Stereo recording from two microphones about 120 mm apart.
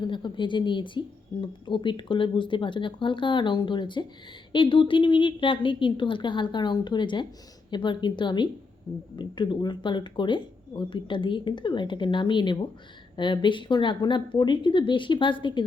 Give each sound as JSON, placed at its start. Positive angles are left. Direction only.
{"t": 0.1, "sound": "speech", "side_deg": 40}